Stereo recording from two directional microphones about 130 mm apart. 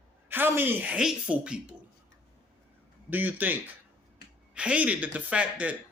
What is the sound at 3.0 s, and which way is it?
Speech, 15° right (ahead or behind).